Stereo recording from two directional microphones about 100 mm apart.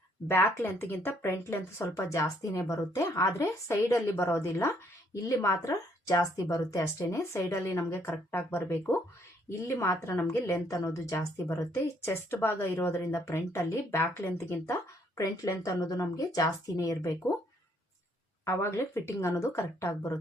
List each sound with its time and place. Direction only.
0.3 s a woman's voice: 20° left (ahead or behind)
18.4 s a woman's voice: 25° left (ahead or behind)